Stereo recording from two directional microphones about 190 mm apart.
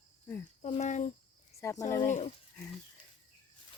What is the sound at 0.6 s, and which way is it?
Speech, 35° left (ahead or behind).